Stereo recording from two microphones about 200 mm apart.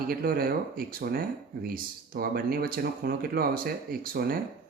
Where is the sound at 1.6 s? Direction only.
45° right (ahead or behind).